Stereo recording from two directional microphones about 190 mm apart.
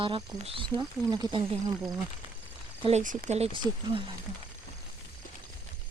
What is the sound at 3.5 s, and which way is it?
Speech, 25° right (ahead or behind).